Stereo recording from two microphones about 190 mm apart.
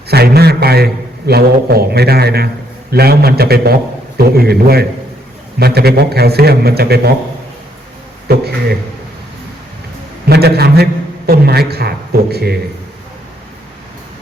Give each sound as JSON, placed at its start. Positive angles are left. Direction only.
{"t": 0.1, "sound": "a man's voice", "side_deg": -55}
{"t": 8.3, "sound": "a man's voice", "side_deg": -55}
{"t": 10.2, "sound": "a man's voice", "side_deg": -55}